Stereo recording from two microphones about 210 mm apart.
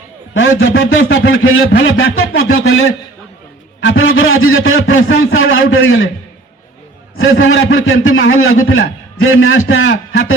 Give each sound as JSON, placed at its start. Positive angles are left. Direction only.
{"t": 0.3, "sound": "a man's voice", "side_deg": 70}
{"t": 7.2, "sound": "a man's voice", "side_deg": 70}